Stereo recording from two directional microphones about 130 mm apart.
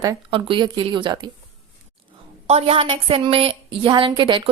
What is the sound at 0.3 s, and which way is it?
A woman's voice, 45° right (ahead or behind).